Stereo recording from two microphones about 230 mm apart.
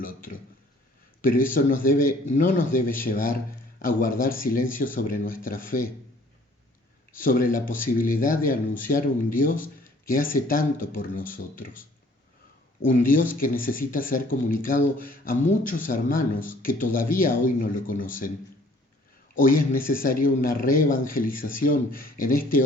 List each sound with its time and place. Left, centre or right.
0.0 s speech: left
7.2 s speech: left
19.3 s speech: left